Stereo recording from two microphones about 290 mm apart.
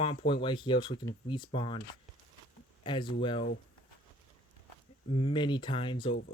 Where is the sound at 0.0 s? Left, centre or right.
Centre.